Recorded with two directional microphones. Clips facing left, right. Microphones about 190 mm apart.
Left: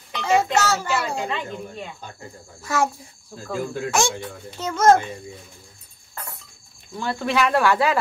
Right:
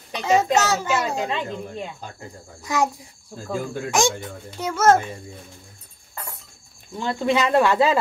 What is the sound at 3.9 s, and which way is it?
A child's voice, 15° right (ahead or behind).